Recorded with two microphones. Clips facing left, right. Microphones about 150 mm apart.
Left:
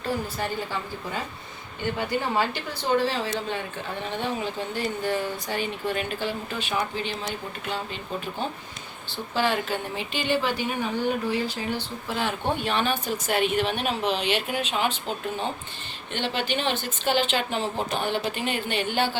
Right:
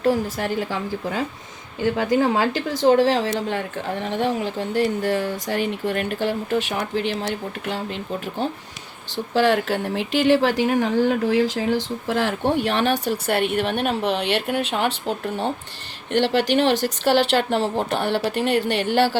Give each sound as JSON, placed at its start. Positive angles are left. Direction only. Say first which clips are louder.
{"t": 0.0, "sound": "a woman's voice", "louder": "right 8 dB", "side_deg": -90}
{"t": 16.1, "sound": "speech", "louder": "right 9 dB", "side_deg": -80}